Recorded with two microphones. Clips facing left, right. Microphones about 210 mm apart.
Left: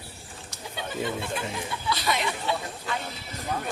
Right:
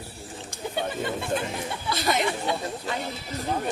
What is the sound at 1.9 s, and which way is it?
Chatter, 45° right (ahead or behind).